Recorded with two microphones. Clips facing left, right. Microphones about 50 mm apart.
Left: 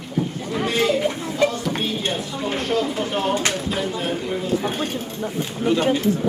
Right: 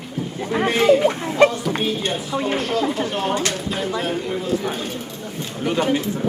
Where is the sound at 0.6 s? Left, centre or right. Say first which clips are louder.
Right 5 dB; right.